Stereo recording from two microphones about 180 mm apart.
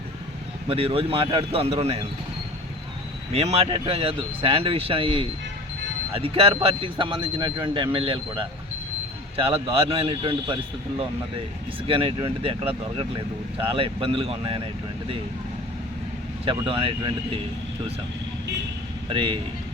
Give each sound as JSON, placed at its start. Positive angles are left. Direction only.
{"t": 0.7, "sound": "speech", "side_deg": -30}
{"t": 3.3, "sound": "a man's voice", "side_deg": -35}
{"t": 9.3, "sound": "a man's voice", "side_deg": -30}
{"t": 16.5, "sound": "a man's voice", "side_deg": -30}